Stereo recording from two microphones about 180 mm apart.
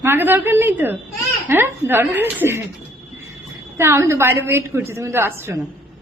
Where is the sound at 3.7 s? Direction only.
15° right (ahead or behind).